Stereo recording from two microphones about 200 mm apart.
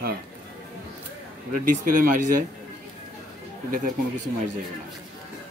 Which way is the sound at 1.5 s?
45° right (ahead or behind).